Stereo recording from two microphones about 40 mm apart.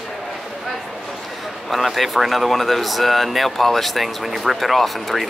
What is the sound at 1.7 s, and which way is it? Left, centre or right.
Speech, centre.